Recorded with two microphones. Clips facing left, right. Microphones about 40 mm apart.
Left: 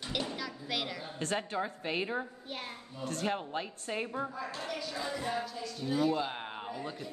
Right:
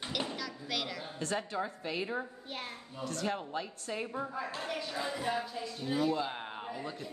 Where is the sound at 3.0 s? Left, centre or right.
Left.